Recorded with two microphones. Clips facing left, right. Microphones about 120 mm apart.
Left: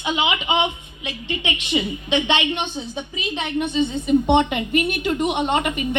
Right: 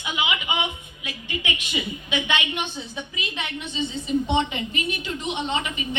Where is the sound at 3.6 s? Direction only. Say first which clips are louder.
Left 11 dB; 55° left (ahead or behind).